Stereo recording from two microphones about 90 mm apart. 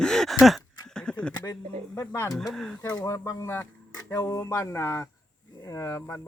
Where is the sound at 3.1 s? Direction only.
35° left (ahead or behind).